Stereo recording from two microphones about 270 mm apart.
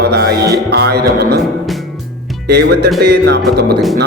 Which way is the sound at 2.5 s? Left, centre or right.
Right.